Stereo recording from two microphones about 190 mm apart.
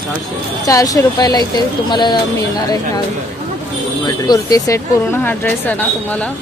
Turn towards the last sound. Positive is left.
turn(degrees=10)  # may be behind; listen again after turning